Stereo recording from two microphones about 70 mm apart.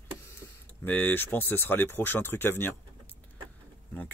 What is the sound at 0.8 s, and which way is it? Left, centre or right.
Speech, left.